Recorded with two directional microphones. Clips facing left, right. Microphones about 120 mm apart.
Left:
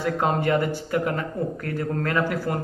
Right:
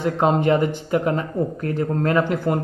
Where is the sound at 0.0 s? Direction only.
20° right (ahead or behind).